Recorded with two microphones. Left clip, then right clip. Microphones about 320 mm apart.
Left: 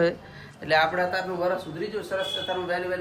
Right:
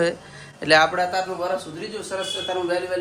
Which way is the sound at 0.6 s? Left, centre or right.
Right.